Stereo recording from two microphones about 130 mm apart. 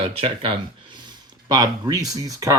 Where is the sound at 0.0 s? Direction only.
45° right (ahead or behind).